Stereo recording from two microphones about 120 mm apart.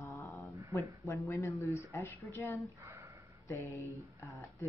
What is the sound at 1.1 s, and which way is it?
Speech, 25° left (ahead or behind).